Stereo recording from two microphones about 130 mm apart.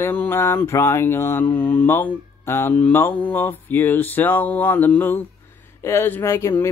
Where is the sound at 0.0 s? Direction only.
15° left (ahead or behind).